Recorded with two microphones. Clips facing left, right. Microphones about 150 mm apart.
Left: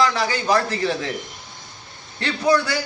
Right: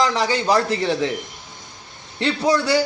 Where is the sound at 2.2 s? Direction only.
30° right (ahead or behind).